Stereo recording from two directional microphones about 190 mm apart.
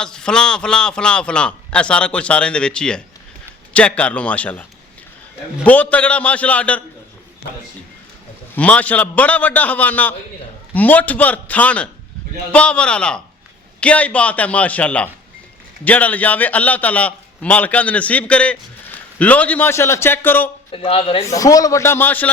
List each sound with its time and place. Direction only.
0.0 s a man's voice: 5° left (ahead or behind)
5.6 s a man's voice: 5° left (ahead or behind)
8.5 s a man's voice: 5° left (ahead or behind)
20.7 s speech: 30° left (ahead or behind)
21.2 s a man's voice: 20° left (ahead or behind)